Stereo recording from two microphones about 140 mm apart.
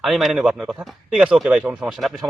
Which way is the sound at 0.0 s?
Centre (ahead or behind).